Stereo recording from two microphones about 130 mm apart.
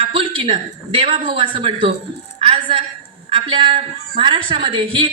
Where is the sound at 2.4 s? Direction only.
45° right (ahead or behind).